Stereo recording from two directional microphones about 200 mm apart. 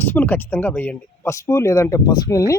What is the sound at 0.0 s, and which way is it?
Speech, 10° left (ahead or behind).